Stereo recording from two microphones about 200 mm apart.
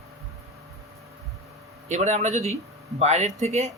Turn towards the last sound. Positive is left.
turn(degrees=-35)  # may be behind; listen again after turning